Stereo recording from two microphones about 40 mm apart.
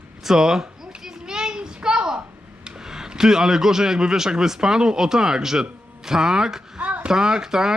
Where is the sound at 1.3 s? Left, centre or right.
Centre.